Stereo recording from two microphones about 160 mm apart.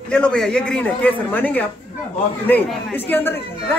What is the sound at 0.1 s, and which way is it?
Speech, 5° left (ahead or behind).